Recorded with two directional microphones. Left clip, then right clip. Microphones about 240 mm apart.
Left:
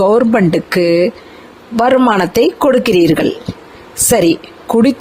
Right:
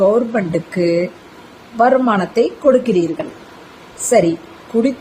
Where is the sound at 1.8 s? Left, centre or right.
Left.